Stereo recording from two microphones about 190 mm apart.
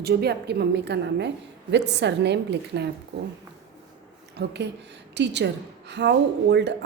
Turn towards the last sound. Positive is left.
turn(degrees=-65)  # may be behind; listen again after turning